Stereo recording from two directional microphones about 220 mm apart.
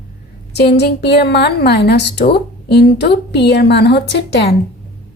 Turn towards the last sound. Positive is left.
turn(degrees=50)  # may be behind; listen again after turning